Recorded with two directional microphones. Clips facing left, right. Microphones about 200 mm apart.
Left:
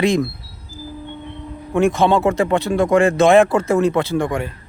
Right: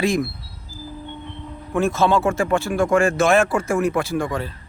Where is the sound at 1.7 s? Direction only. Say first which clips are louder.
Left 3 dB; 15° left (ahead or behind).